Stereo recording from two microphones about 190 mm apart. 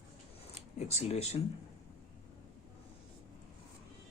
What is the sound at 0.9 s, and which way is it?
Speech, 35° left (ahead or behind).